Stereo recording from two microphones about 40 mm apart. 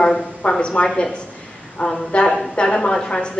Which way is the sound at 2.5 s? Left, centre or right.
Centre.